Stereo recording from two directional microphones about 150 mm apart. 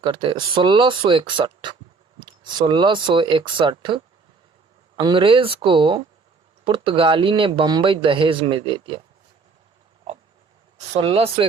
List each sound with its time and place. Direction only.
0.0 s speech: 35° right (ahead or behind)
2.1 s a sound: 30° right (ahead or behind)
2.6 s speech: 30° right (ahead or behind)
10.8 s speech: 40° right (ahead or behind)